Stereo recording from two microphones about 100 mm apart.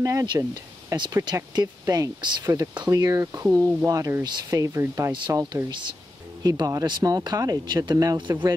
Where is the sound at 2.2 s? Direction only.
50° right (ahead or behind).